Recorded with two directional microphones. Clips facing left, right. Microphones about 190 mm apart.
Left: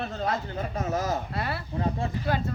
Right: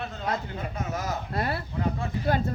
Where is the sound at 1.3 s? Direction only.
45° right (ahead or behind).